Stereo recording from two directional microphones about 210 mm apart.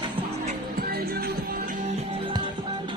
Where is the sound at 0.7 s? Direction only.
45° right (ahead or behind).